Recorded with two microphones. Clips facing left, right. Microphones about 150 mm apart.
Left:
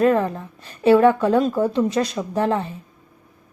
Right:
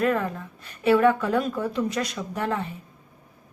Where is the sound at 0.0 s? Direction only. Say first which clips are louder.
Left 6 dB; 30° left (ahead or behind).